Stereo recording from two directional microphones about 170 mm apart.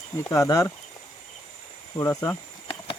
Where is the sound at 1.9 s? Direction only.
20° left (ahead or behind).